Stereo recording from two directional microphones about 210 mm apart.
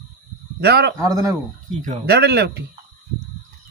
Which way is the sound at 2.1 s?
50° right (ahead or behind).